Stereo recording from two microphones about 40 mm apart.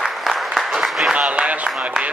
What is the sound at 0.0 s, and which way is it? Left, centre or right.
Applause, centre.